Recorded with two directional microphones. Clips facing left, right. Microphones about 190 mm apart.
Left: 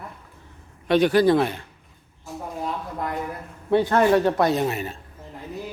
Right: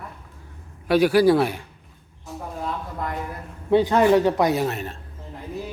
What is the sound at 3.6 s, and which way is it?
A man's voice, 15° right (ahead or behind).